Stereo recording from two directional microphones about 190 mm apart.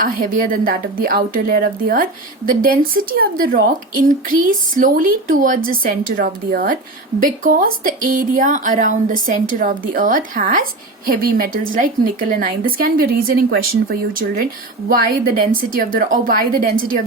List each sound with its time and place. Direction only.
0.0 s speech: 45° right (ahead or behind)